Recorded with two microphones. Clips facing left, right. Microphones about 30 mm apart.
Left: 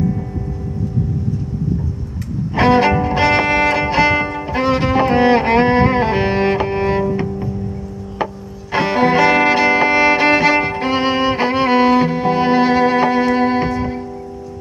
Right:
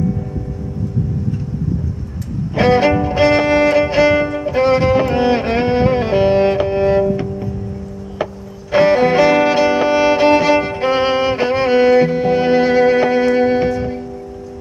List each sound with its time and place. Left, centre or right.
2.8 s music: centre
3.3 s music: left
3.7 s music: centre
8.7 s music: centre
9.3 s violin: centre
10.1 s music: centre
10.8 s violin: centre
11.3 s music: centre